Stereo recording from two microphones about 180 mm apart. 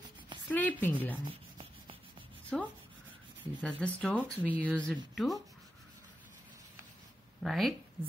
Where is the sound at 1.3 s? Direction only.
30° right (ahead or behind).